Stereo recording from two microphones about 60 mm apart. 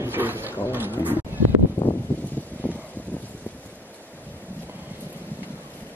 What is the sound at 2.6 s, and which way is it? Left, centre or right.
Wind, left.